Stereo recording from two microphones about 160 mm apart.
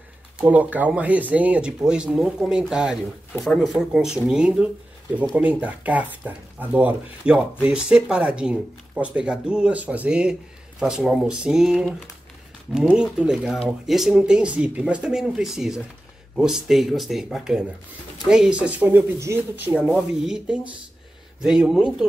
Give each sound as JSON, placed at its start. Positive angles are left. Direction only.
{"t": 0.4, "sound": "speech", "side_deg": -10}